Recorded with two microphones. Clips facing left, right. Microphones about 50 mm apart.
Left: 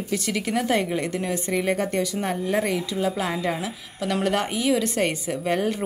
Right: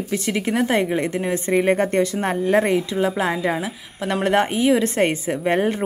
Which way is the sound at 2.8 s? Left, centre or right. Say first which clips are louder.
Right 4 dB; right.